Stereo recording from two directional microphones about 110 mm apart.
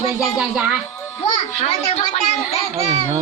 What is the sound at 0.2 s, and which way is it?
Speech, 5° right (ahead or behind).